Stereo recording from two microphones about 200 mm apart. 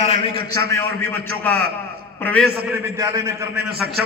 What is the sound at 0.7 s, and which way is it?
A man's voice, 10° left (ahead or behind).